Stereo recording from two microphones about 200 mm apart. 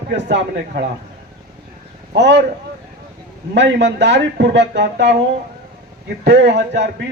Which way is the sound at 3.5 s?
60° right (ahead or behind).